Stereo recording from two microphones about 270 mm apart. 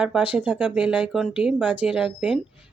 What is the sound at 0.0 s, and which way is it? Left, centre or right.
Speech, centre.